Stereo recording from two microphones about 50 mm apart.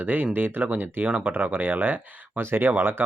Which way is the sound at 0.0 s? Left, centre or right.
Right.